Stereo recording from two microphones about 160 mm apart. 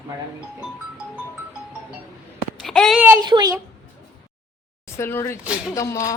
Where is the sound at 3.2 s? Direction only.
25° right (ahead or behind).